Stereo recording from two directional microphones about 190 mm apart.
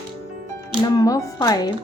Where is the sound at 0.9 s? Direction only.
20° left (ahead or behind).